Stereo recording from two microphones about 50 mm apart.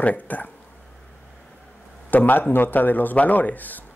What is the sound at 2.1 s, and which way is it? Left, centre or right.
Speech, left.